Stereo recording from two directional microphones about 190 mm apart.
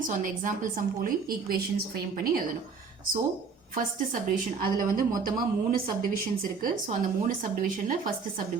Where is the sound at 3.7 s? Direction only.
45° right (ahead or behind).